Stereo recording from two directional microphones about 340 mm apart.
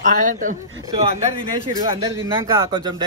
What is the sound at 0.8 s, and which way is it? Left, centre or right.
Speech, centre.